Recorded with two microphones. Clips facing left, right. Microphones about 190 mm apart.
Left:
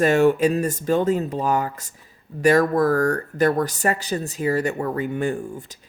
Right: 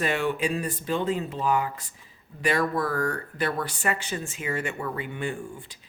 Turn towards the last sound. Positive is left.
turn(degrees=40)  # may be behind; listen again after turning